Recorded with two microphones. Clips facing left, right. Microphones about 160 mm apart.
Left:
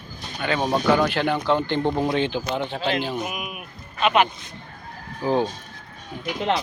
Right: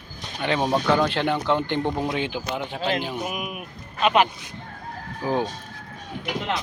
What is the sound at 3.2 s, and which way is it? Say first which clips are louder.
Speech: right 1 dB; 5° left (ahead or behind).